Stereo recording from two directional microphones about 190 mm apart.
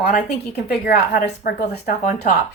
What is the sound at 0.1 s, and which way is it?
Speech, 40° left (ahead or behind).